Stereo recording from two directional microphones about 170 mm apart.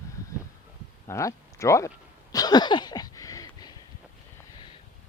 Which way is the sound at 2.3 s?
25° left (ahead or behind).